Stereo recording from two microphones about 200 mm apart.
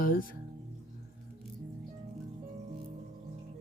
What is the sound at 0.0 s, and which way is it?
Music, 45° left (ahead or behind).